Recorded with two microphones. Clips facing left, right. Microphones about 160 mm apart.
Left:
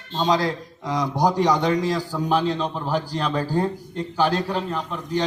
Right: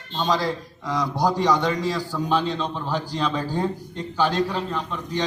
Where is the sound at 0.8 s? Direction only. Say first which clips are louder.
Left 1 dB; 15° left (ahead or behind).